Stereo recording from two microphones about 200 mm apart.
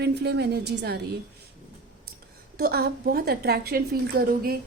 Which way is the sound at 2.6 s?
50° right (ahead or behind).